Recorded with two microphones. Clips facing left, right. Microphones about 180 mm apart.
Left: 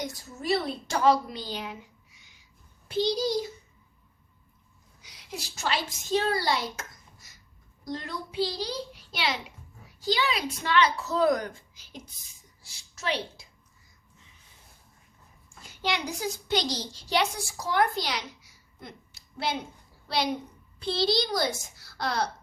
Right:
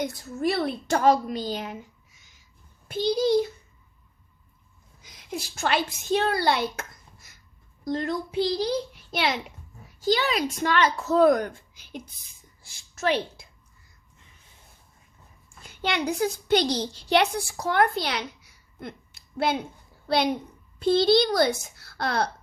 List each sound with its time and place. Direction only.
0.0 s a woman's voice: 60° right (ahead or behind)
5.0 s a woman's voice: 50° right (ahead or behind)
15.6 s a child's voice: 55° right (ahead or behind)